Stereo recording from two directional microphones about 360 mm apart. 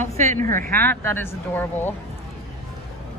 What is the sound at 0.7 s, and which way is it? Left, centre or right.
A man's voice, centre.